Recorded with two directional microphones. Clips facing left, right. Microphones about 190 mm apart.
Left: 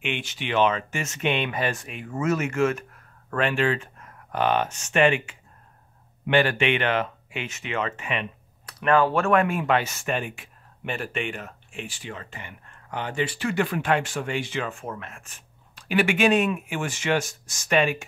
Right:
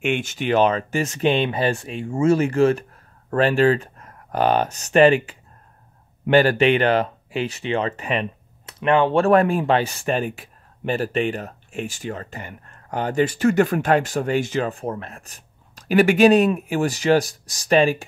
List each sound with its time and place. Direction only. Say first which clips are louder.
0.0 s speech: right 8 dB; 45° right (ahead or behind)
8.6 s speech: right 3 dB; 25° right (ahead or behind)